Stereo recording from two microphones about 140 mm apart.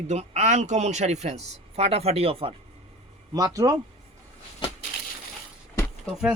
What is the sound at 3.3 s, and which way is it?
Speech, 25° right (ahead or behind).